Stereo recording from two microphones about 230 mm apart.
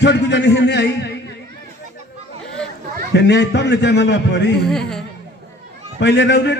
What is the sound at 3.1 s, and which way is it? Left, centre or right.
A man's voice, left.